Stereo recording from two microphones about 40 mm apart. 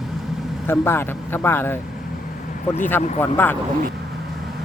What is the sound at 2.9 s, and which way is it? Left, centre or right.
Speech, left.